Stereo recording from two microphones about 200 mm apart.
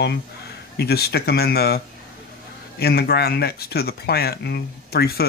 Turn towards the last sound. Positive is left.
turn(degrees=50)  # may be behind; listen again after turning